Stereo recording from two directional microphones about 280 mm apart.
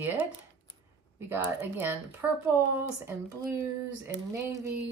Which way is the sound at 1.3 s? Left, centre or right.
Centre.